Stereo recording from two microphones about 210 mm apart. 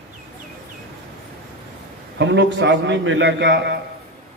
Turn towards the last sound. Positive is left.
turn(degrees=-55)  # may be behind; listen again after turning